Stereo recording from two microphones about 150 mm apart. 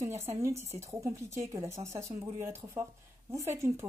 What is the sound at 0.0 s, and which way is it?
Speech, 15° right (ahead or behind).